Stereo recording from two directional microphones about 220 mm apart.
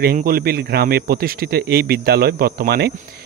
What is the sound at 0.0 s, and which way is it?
Speech, 45° right (ahead or behind).